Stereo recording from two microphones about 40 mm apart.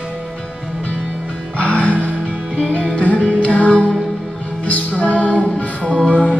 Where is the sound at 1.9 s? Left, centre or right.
Right.